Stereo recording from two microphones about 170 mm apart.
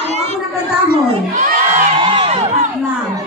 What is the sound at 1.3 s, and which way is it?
Crowd, 50° right (ahead or behind).